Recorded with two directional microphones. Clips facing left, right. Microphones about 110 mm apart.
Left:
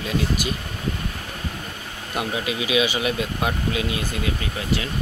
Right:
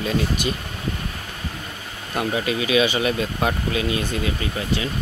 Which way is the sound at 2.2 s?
5° left (ahead or behind).